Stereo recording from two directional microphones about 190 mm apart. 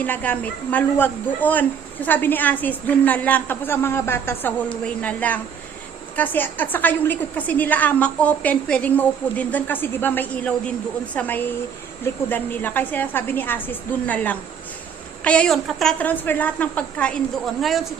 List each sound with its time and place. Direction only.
0.0 s a man's voice: 10° left (ahead or behind)